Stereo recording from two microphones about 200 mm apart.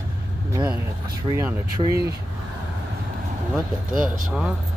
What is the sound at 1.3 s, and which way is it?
Speech, 20° right (ahead or behind).